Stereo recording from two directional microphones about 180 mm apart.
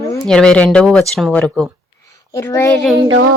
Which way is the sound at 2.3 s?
15° left (ahead or behind).